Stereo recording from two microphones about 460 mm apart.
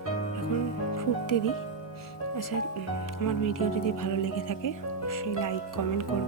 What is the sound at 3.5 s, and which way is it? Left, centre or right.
Speech, left.